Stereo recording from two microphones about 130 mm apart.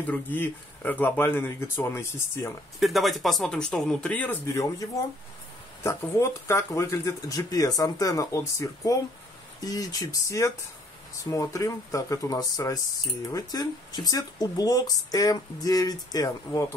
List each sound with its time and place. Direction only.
0.0 s speech: 15° left (ahead or behind)
2.8 s speech: centre (ahead or behind); by 4.8 s 25° left (ahead or behind)
5.9 s speech: 20° left (ahead or behind)